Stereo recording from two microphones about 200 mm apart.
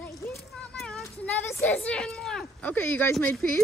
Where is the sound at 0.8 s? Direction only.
Centre (ahead or behind).